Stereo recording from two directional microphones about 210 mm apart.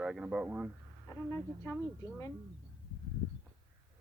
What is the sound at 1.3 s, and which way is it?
Speech, 10° left (ahead or behind).